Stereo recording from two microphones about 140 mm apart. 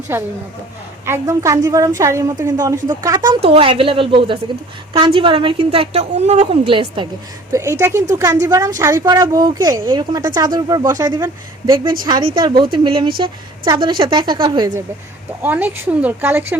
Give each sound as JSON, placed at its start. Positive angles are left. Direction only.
{"t": 0.1, "sound": "a woman's voice", "side_deg": -15}
{"t": 3.5, "sound": "a woman's voice", "side_deg": -40}
{"t": 7.5, "sound": "a woman's voice", "side_deg": -20}
{"t": 15.4, "sound": "speech", "side_deg": -15}